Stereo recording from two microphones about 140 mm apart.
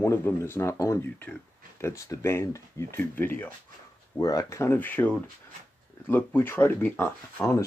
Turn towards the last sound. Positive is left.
turn(degrees=15)  # may be behind; listen again after turning